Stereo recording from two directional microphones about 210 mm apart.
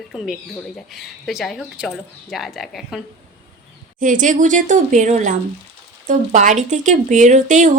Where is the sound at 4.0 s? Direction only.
40° right (ahead or behind).